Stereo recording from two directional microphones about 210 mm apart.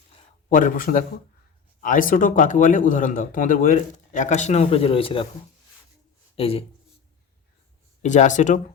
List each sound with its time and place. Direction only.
0.4 s speech: 40° left (ahead or behind)
6.3 s speech: 25° left (ahead or behind)
8.0 s speech: 35° left (ahead or behind)